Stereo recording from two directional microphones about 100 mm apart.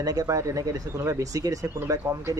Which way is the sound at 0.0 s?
40° right (ahead or behind).